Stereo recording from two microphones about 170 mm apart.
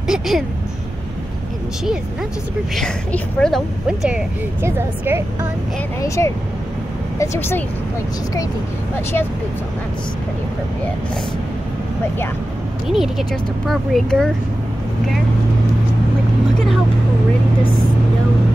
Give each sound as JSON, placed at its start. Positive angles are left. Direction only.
{"t": 0.0, "sound": "a sound", "side_deg": -5}
{"t": 2.7, "sound": "a woman's voice", "side_deg": 5}
{"t": 5.9, "sound": "speech", "side_deg": 20}
{"t": 12.8, "sound": "a woman's voice", "side_deg": -5}